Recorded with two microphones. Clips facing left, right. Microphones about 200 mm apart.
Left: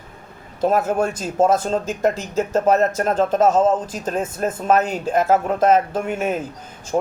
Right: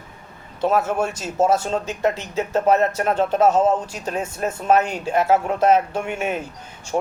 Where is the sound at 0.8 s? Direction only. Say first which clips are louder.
Left 2 dB; 35° left (ahead or behind).